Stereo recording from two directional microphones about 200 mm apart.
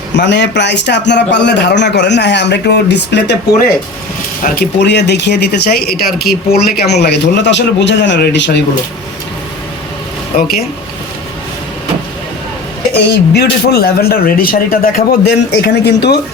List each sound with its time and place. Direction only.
0.1 s speech: 60° left (ahead or behind)
4.4 s speech: 55° left (ahead or behind)
12.9 s speech: 55° left (ahead or behind)